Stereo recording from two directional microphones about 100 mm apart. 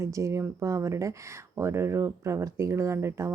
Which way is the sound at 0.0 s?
30° right (ahead or behind).